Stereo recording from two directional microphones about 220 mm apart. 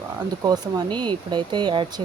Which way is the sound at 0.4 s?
20° right (ahead or behind).